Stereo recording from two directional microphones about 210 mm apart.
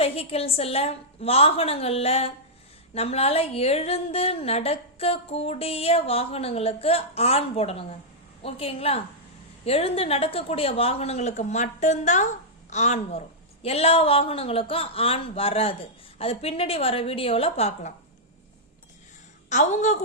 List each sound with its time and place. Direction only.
0.0 s a woman's voice: 30° left (ahead or behind)
19.5 s a woman's voice: 35° left (ahead or behind)